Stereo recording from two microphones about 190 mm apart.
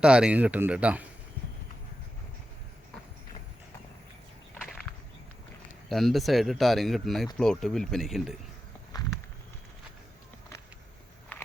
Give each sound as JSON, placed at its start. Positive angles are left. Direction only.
{"t": 0.0, "sound": "speech", "side_deg": -5}
{"t": 4.5, "sound": "whip", "side_deg": 0}
{"t": 5.9, "sound": "speech", "side_deg": 0}
{"t": 8.9, "sound": "walk", "side_deg": 20}
{"t": 11.3, "sound": "biting", "side_deg": 10}